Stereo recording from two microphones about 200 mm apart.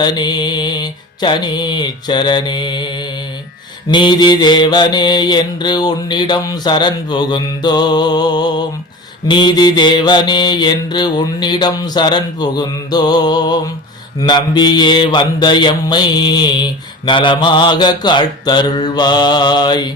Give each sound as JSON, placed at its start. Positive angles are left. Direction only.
{"t": 0.0, "sound": "mantra", "side_deg": 20}